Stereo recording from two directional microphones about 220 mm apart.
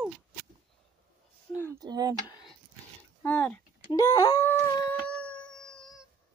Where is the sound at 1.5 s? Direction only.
15° right (ahead or behind).